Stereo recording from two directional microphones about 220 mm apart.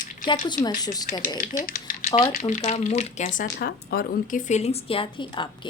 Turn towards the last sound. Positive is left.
turn(degrees=25)  # may be behind; listen again after turning